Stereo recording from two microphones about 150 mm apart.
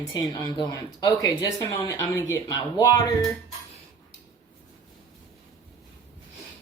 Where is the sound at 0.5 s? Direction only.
25° left (ahead or behind).